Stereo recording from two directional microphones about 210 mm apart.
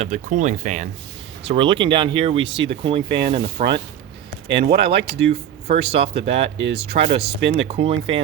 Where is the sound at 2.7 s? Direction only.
25° right (ahead or behind).